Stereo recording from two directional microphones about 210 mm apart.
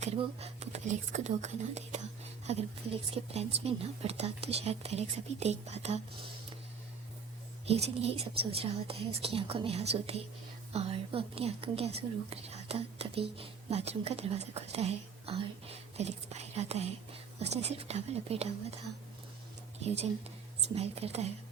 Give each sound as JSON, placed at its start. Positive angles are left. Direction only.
{"t": 0.0, "sound": "a woman's voice", "side_deg": -30}
{"t": 7.6, "sound": "a woman's voice", "side_deg": -30}
{"t": 20.6, "sound": "speech", "side_deg": -30}